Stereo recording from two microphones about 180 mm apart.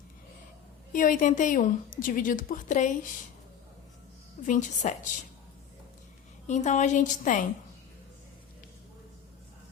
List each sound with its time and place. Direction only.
0.9 s a woman's voice: 50° left (ahead or behind)
4.4 s a woman's voice: 40° left (ahead or behind)
6.5 s a woman's voice: 40° left (ahead or behind)